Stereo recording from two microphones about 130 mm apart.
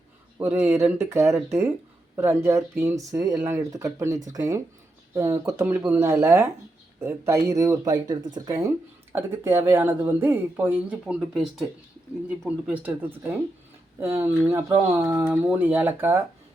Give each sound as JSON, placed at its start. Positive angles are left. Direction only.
{"t": 0.3, "sound": "a woman's voice", "side_deg": -20}